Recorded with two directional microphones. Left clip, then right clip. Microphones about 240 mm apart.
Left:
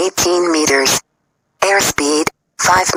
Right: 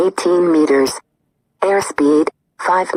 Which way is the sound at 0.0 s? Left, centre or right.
Left.